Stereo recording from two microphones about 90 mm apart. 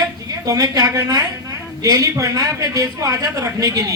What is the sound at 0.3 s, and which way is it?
A woman's voice, 40° right (ahead or behind).